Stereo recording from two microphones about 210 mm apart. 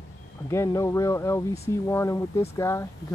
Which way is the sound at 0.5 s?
15° left (ahead or behind).